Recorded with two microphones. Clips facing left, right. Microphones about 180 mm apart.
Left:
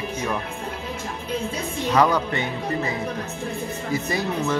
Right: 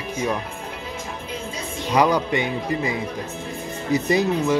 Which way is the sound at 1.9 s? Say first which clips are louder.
Right 2 dB; 15° right (ahead or behind).